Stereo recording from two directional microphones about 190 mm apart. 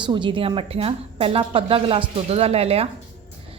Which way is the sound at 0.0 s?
25° right (ahead or behind).